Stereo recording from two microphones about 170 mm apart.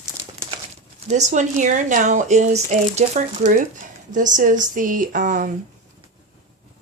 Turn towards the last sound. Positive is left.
turn(degrees=-50)  # may be behind; listen again after turning